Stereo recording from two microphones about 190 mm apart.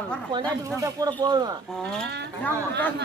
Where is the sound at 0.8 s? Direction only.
20° right (ahead or behind).